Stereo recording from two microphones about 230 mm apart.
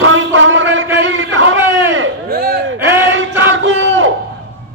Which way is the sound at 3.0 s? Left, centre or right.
Right.